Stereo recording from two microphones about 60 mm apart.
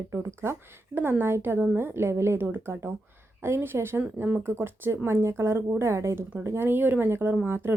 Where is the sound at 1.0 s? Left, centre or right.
Right.